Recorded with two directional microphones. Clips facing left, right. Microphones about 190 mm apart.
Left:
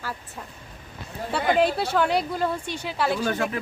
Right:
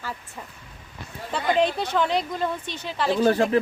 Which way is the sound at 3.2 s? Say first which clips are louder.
Right 6 dB; 35° right (ahead or behind).